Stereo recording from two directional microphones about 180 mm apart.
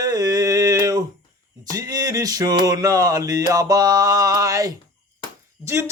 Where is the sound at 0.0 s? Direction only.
20° right (ahead or behind).